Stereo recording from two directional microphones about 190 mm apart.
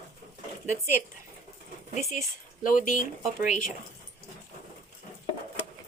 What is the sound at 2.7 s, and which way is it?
Speech, 45° left (ahead or behind).